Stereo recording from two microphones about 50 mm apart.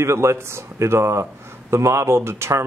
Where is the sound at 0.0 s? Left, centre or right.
Right.